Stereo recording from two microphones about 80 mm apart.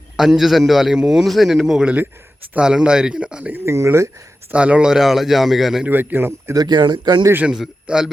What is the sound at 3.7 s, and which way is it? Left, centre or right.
Speech, right.